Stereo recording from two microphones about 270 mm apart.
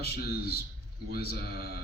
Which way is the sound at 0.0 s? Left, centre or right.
Left.